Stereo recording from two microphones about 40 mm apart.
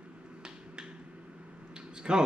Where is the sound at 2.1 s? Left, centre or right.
Right.